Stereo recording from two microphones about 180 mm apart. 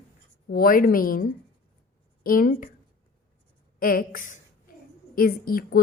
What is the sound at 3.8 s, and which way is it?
A woman's voice, 50° left (ahead or behind).